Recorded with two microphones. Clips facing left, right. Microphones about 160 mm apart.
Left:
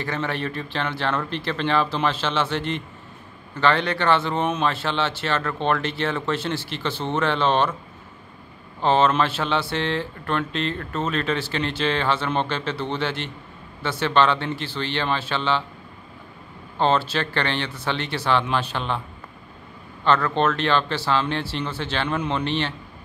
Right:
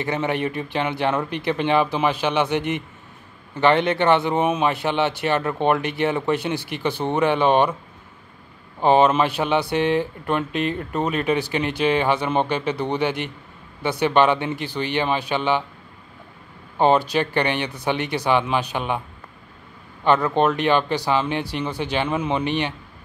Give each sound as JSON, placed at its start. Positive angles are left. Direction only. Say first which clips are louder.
{"t": 0.0, "sound": "speech", "louder": "right 4 dB", "side_deg": -20}
{"t": 8.8, "sound": "speech", "louder": "right 3 dB", "side_deg": -15}
{"t": 16.7, "sound": "speech", "louder": "right 4 dB", "side_deg": -15}
{"t": 20.1, "sound": "speech", "louder": "right 2 dB", "side_deg": -15}